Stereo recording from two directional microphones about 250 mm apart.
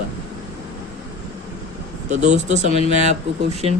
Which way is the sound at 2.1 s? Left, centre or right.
Right.